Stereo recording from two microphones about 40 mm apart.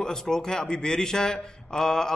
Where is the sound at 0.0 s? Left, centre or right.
Centre.